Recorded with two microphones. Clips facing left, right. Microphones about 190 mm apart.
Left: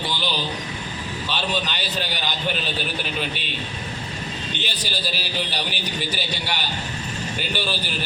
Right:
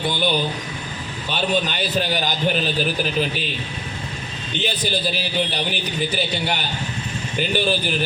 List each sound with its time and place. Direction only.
0.1 s a sound: 55° right (ahead or behind)
1.3 s a man's voice: 50° right (ahead or behind)
4.6 s a man's voice: 50° right (ahead or behind)